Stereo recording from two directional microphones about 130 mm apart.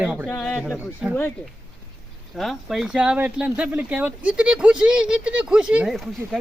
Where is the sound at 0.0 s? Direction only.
10° right (ahead or behind).